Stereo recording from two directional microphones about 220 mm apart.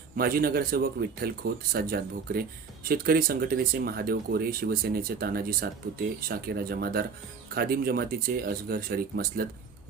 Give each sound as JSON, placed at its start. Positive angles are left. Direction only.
{"t": 0.2, "sound": "speech", "side_deg": -40}